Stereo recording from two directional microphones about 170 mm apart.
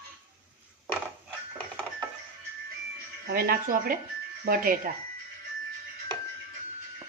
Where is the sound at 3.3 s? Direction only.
60° right (ahead or behind).